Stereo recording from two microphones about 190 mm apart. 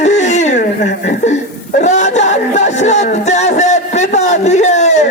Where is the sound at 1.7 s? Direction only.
40° left (ahead or behind).